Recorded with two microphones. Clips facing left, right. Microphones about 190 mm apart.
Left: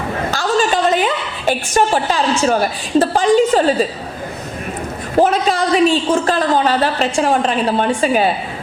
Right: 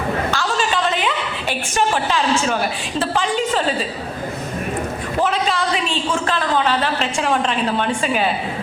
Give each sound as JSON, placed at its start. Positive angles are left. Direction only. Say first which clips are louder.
{"t": 0.3, "sound": "a sound", "louder": "left 5 dB", "side_deg": 40}
{"t": 2.5, "sound": "a woman's voice", "louder": "left 6 dB", "side_deg": 40}
{"t": 5.2, "sound": "a woman's voice", "louder": "left 5 dB", "side_deg": 40}